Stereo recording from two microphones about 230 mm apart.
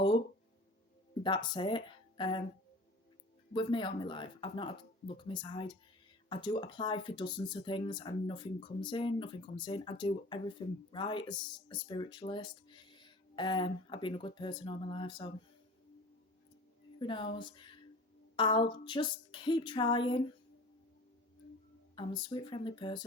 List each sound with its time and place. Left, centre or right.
1.2 s speech: centre
3.5 s speech: left
17.0 s speech: left
21.9 s speech: centre